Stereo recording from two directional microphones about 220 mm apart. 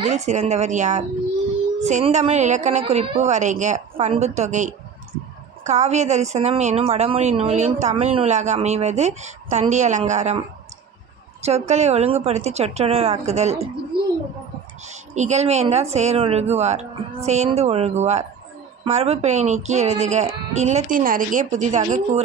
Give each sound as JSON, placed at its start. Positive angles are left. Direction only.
{"t": 0.0, "sound": "a woman's voice", "side_deg": -30}
{"t": 11.4, "sound": "speech", "side_deg": -30}
{"t": 13.9, "sound": "a sound", "side_deg": -45}
{"t": 14.9, "sound": "a woman's voice", "side_deg": -30}